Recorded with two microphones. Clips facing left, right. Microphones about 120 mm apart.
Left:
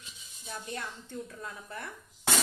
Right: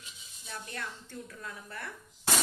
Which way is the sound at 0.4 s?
25° left (ahead or behind).